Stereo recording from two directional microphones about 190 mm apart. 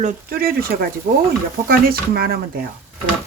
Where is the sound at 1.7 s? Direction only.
50° right (ahead or behind).